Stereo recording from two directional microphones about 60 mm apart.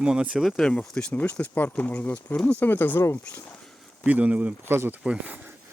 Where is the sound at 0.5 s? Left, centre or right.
Centre.